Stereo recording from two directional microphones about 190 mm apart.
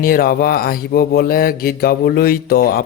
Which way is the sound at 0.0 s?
50° left (ahead or behind).